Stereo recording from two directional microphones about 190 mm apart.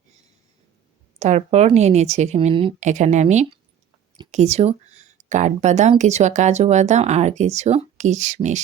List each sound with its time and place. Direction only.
1.2 s speech: 35° right (ahead or behind)
2.8 s speech: 40° right (ahead or behind)